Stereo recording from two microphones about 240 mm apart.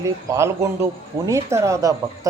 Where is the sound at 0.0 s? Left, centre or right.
Centre.